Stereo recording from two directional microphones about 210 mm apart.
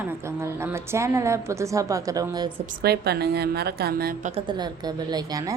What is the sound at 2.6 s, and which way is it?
A woman's voice, 45° right (ahead or behind).